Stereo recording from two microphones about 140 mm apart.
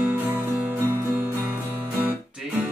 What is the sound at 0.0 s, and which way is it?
Music, 15° right (ahead or behind).